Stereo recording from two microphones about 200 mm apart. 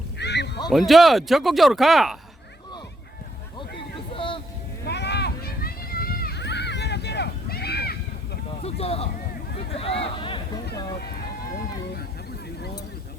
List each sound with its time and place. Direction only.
0.2 s honk: 60° left (ahead or behind)
0.7 s speech: centre (ahead or behind)
4.1 s a sound: 25° left (ahead or behind)
4.9 s a sound: 55° left (ahead or behind)
8.6 s speech: 30° left (ahead or behind)
9.7 s hubbub: 30° left (ahead or behind)